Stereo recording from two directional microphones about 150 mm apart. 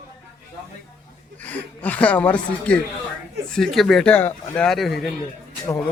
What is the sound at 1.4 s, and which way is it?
Speech, 10° left (ahead or behind).